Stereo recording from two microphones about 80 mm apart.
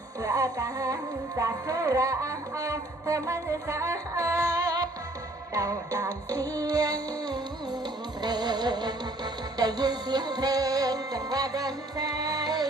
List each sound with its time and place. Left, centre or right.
0.2 s music: right
1.4 s speech: right
8.2 s music: right